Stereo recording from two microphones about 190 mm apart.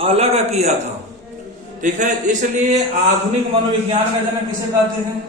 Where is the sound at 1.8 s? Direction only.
40° right (ahead or behind).